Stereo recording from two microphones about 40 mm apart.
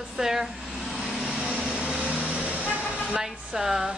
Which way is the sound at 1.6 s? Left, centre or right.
Right.